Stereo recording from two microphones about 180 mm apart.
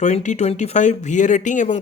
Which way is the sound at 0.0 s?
40° left (ahead or behind).